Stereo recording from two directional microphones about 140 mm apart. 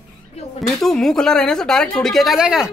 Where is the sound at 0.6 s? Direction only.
Centre (ahead or behind).